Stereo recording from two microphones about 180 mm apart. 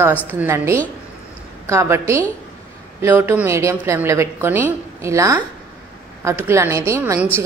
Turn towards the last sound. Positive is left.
turn(degrees=-15)  # may be behind; listen again after turning